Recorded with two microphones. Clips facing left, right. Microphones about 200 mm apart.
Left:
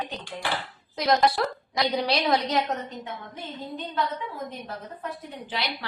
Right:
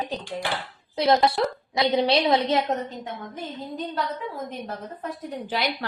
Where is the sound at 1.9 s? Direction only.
25° right (ahead or behind).